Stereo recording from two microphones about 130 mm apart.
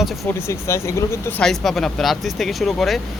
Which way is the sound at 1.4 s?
Centre (ahead or behind).